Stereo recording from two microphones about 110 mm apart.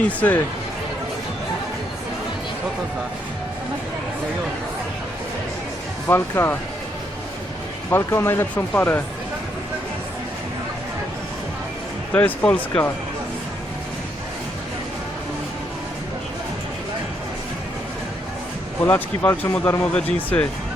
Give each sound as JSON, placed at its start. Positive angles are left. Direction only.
{"t": 0.2, "sound": "speech", "side_deg": 15}
{"t": 6.1, "sound": "speech", "side_deg": 20}
{"t": 7.9, "sound": "speech", "side_deg": 20}
{"t": 12.1, "sound": "speech", "side_deg": 15}
{"t": 18.9, "sound": "speech", "side_deg": 15}